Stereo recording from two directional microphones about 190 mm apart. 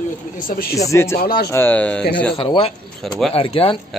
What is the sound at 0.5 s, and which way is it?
Speech, 50° left (ahead or behind).